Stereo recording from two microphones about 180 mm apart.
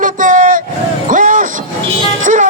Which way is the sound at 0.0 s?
50° right (ahead or behind).